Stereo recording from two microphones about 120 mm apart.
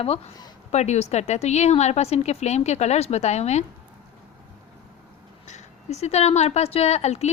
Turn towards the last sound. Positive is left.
turn(degrees=65)  # may be behind; listen again after turning